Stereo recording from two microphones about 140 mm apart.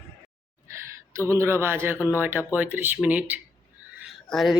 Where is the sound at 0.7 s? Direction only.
20° right (ahead or behind).